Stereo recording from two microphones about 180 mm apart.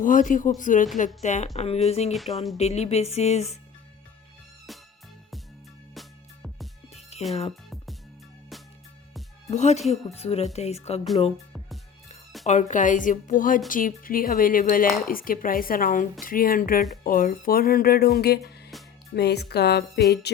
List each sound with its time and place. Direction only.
0.0 s speech: 45° left (ahead or behind)
2.1 s speech: centre (ahead or behind)
2.6 s speech: 35° left (ahead or behind)
5.9 s music: centre (ahead or behind)
6.9 s music: 35° left (ahead or behind)
9.5 s speech: 40° left (ahead or behind)
11.3 s music: centre (ahead or behind)
12.5 s speech: 40° left (ahead or behind); by 20.4 s 65° left (ahead or behind)